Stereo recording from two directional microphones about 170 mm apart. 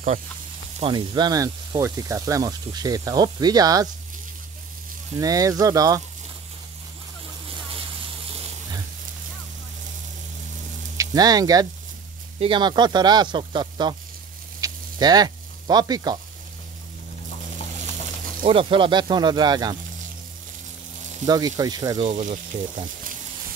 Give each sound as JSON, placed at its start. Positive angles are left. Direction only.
{"t": 0.7, "sound": "speech", "side_deg": -30}
{"t": 5.2, "sound": "speech", "side_deg": -20}
{"t": 11.0, "sound": "speech", "side_deg": -20}
{"t": 14.6, "sound": "sizzle", "side_deg": -25}
{"t": 18.4, "sound": "speech", "side_deg": -30}
{"t": 21.3, "sound": "speech", "side_deg": -20}
{"t": 22.0, "sound": "speech", "side_deg": -50}